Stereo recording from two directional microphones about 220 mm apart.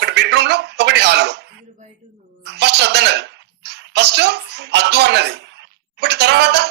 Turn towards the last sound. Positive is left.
turn(degrees=-50)  # may be behind; listen again after turning